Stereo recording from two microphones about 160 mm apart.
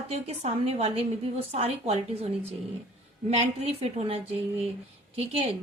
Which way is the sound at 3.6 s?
40° right (ahead or behind).